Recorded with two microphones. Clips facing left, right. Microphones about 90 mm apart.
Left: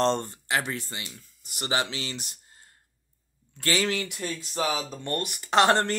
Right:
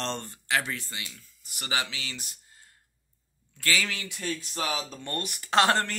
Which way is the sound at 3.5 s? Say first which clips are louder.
Left 3 dB; 35° left (ahead or behind).